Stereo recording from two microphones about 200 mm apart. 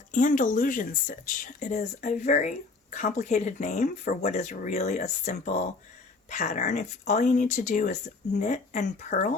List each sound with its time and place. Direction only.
0.1 s speech: 40° left (ahead or behind)